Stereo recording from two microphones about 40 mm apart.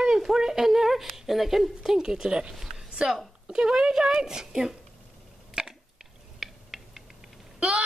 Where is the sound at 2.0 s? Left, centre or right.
Centre.